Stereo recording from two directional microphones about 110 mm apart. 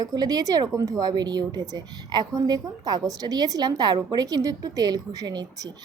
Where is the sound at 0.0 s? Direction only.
35° right (ahead or behind).